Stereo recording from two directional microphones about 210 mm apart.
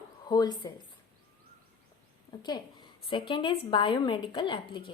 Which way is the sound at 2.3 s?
20° left (ahead or behind).